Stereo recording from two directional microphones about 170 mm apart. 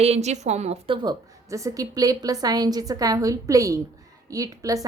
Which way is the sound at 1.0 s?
20° right (ahead or behind).